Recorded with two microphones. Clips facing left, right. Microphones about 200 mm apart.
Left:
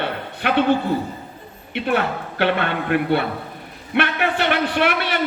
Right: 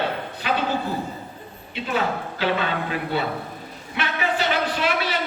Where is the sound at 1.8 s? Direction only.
65° left (ahead or behind).